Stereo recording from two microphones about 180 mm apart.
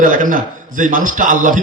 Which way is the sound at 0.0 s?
45° right (ahead or behind).